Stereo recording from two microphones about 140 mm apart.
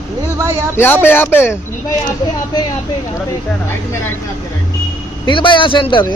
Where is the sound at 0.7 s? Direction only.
15° left (ahead or behind).